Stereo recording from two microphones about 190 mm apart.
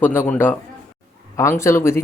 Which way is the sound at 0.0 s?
10° left (ahead or behind).